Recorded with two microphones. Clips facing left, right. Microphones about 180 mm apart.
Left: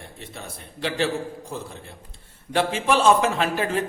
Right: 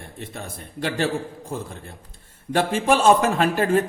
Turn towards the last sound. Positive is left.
turn(degrees=-50)  # may be behind; listen again after turning